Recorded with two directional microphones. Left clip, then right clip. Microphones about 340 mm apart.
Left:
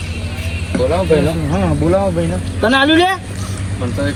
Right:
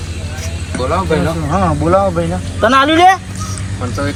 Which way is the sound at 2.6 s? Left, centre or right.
Right.